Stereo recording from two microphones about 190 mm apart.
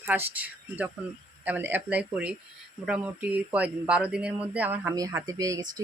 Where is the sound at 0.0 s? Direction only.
10° right (ahead or behind).